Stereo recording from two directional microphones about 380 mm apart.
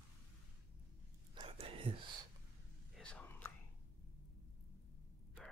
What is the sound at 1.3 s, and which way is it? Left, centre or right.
Whispering, centre.